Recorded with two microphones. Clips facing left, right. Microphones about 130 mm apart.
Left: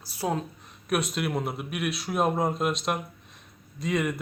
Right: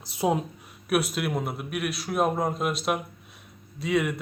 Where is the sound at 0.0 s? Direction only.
20° right (ahead or behind).